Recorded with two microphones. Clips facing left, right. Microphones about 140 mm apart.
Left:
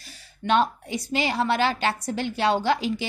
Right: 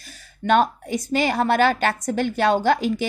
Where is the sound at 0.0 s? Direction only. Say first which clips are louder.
Right 4 dB; 50° right (ahead or behind).